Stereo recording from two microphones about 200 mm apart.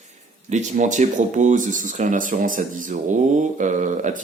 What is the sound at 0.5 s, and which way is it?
Speech, 40° right (ahead or behind).